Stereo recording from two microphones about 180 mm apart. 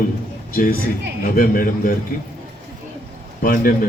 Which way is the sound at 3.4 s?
50° left (ahead or behind).